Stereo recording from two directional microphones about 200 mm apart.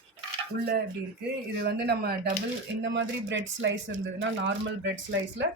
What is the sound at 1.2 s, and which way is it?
Speech, 55° right (ahead or behind).